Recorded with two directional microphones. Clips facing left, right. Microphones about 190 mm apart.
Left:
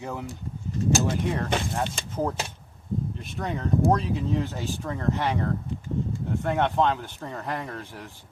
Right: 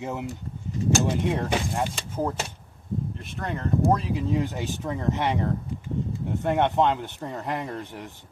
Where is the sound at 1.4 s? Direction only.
10° right (ahead or behind).